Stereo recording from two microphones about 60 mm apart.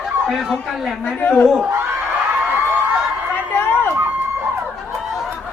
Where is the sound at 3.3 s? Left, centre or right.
Left.